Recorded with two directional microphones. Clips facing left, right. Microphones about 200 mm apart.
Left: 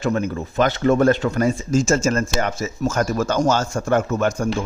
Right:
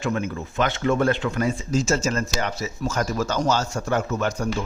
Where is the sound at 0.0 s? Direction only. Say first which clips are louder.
Left 4 dB; 40° left (ahead or behind).